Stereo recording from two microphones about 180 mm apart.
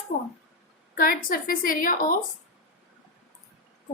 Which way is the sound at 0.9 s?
55° left (ahead or behind).